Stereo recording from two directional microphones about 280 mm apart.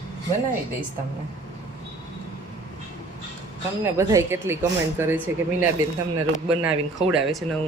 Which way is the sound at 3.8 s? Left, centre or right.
Centre.